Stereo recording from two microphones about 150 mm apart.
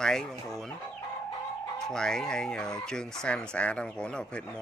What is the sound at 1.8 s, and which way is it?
Speech, 5° left (ahead or behind).